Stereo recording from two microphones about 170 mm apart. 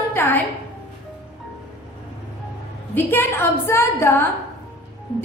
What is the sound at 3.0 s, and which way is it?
A woman's voice, 15° left (ahead or behind).